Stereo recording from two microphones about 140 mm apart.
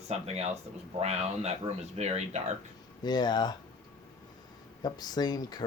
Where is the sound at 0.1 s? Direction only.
50° right (ahead or behind).